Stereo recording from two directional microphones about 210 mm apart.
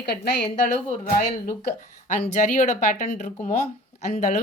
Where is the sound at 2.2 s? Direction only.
35° left (ahead or behind).